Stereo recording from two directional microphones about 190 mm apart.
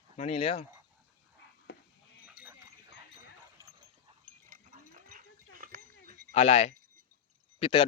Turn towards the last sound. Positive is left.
turn(degrees=30)  # may be behind; listen again after turning